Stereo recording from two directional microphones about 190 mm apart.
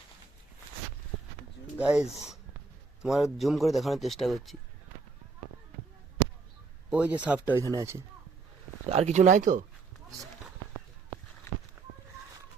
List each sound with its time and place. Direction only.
1.8 s a man's voice: 5° right (ahead or behind)
6.9 s speech: 5° right (ahead or behind)
8.9 s speech: 35° right (ahead or behind)